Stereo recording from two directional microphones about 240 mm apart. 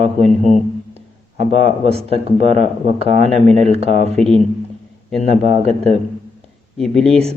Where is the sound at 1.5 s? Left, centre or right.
Right.